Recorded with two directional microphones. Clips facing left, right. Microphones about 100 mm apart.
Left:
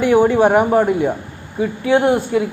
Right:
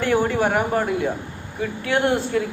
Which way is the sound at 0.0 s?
15° left (ahead or behind).